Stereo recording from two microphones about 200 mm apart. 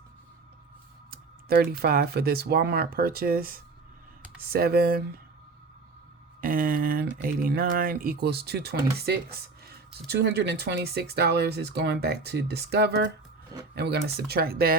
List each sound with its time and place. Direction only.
1.1 s typing: 50° right (ahead or behind)
1.8 s speech: 50° right (ahead or behind)
6.4 s speech: 45° right (ahead or behind)